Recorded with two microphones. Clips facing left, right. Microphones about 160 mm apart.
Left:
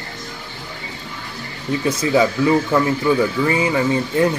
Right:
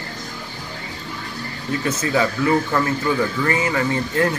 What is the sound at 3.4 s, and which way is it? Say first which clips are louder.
Speech: left 3 dB; 15° left (ahead or behind).